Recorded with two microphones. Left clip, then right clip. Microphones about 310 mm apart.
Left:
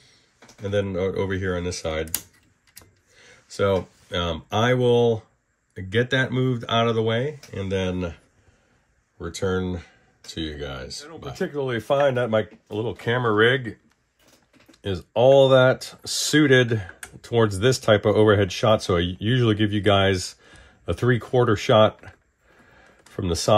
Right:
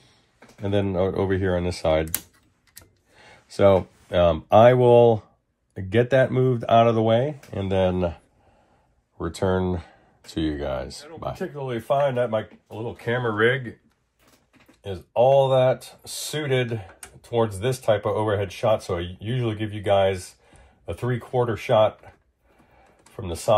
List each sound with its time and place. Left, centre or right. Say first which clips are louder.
0.7 s speech: right 1 dB; centre
3.2 s speech: right 4 dB; centre
9.2 s speech: right 2 dB; centre
11.3 s speech: left 9 dB; left
14.8 s speech: even; left